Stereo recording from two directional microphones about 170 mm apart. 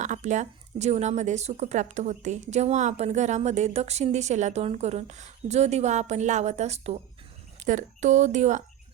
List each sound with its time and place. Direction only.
0.0 s speech: 45° right (ahead or behind)